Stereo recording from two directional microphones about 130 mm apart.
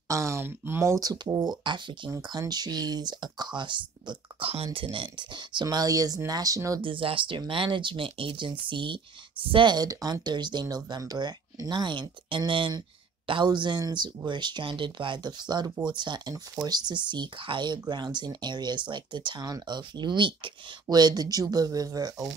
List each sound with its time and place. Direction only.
0.1 s speech: 25° right (ahead or behind)
6.8 s speech: 40° right (ahead or behind)